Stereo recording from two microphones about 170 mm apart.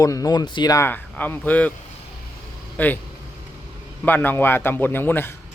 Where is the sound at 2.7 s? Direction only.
10° left (ahead or behind).